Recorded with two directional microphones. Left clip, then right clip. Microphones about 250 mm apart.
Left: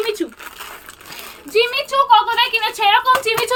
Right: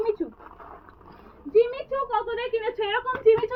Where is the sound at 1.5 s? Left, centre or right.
Left.